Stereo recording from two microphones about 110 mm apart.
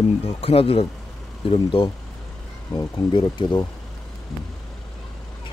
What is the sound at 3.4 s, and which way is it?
Speech, 50° left (ahead or behind).